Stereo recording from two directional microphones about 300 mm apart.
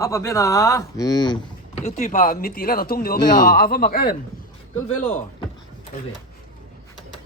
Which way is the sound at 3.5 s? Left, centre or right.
Left.